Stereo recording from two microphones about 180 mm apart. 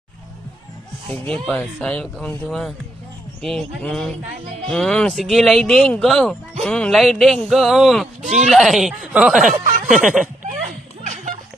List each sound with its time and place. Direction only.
1.3 s speech: 5° left (ahead or behind)
9.5 s speech: 45° right (ahead or behind)
9.9 s speech: 5° right (ahead or behind)